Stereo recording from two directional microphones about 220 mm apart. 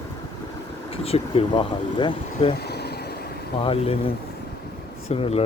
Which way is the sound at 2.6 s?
50° left (ahead or behind).